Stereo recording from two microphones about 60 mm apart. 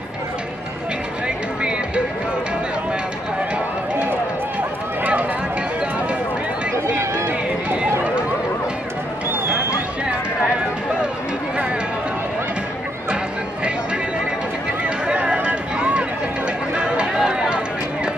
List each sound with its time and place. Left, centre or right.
1.2 s a sound: centre
4.1 s run: right
7.2 s run: right
15.1 s run: right